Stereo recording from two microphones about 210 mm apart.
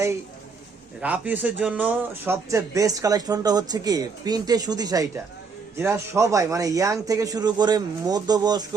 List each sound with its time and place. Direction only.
1.0 s speech: 5° right (ahead or behind)